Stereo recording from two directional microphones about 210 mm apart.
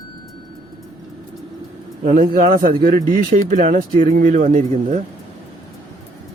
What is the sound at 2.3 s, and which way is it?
Speech, 45° right (ahead or behind).